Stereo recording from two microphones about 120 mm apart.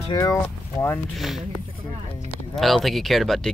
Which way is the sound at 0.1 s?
25° left (ahead or behind).